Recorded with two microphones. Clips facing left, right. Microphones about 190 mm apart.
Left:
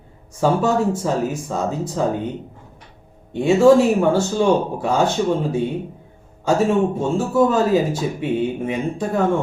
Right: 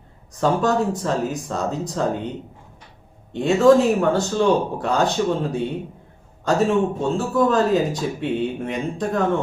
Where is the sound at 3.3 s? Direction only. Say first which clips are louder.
Left 2 dB; 10° left (ahead or behind).